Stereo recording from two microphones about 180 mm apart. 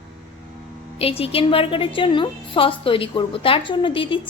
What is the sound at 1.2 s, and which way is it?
Speech, 30° left (ahead or behind).